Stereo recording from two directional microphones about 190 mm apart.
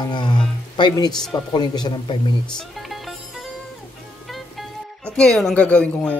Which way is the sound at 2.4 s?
Centre (ahead or behind).